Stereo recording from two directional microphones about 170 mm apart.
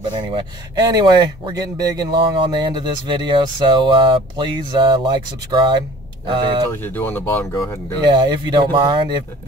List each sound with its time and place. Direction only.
0.2 s speech: 25° right (ahead or behind)
6.7 s speech: 10° left (ahead or behind)
8.0 s speech: 25° right (ahead or behind)